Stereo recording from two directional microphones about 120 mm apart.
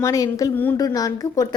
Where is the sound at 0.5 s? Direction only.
15° left (ahead or behind).